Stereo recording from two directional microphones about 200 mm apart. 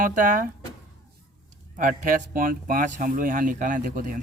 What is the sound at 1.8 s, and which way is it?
Speech, 40° right (ahead or behind).